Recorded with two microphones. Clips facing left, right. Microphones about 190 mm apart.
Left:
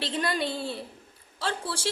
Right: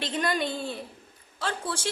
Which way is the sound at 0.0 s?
30° left (ahead or behind).